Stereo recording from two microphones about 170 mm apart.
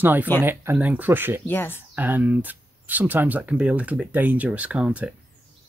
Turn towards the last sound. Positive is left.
turn(degrees=-5)  # may be behind; listen again after turning